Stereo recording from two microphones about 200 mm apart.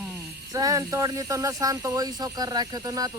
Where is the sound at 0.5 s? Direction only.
15° right (ahead or behind).